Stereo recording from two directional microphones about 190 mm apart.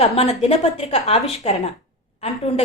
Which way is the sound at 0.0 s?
30° left (ahead or behind).